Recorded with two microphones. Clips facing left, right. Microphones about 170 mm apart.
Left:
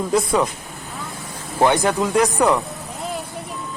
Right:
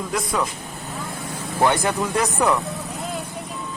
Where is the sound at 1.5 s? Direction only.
15° left (ahead or behind).